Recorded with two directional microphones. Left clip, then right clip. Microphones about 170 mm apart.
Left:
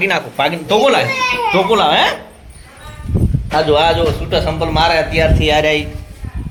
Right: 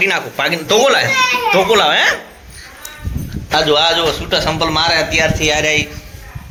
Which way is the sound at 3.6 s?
5° right (ahead or behind).